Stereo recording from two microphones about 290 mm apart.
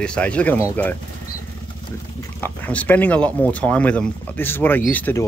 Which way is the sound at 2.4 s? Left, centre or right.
Centre.